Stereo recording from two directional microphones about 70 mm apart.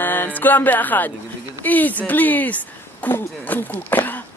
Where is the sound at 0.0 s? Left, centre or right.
Left.